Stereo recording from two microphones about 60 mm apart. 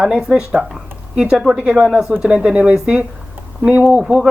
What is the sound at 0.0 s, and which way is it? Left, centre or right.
Speech, centre.